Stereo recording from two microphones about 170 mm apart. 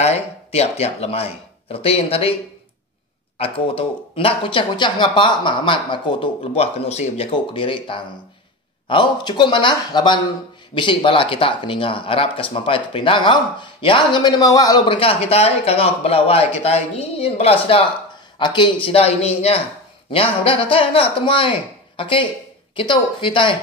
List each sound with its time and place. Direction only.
0.0 s speech: 40° left (ahead or behind)
3.3 s speech: 35° left (ahead or behind)